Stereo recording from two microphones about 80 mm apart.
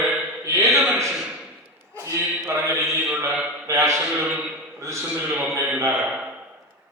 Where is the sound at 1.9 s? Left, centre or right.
Right.